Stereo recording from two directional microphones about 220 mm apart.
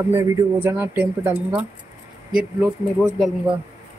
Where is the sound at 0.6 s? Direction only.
10° right (ahead or behind).